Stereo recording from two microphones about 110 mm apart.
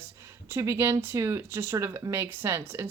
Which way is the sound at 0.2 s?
25° right (ahead or behind).